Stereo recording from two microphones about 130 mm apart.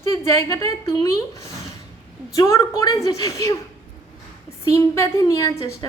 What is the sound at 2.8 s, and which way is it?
Speech, 25° left (ahead or behind).